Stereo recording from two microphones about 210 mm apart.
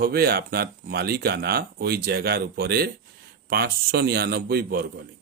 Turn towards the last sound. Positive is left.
turn(degrees=-45)  # may be behind; listen again after turning